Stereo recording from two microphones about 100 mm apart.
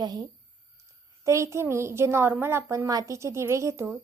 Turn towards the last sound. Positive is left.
turn(degrees=-30)  # may be behind; listen again after turning